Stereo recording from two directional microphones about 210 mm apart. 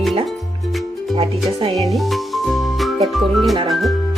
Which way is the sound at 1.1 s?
30° right (ahead or behind).